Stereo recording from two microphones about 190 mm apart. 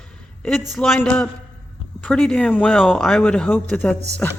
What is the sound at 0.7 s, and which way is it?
Speech, centre (ahead or behind).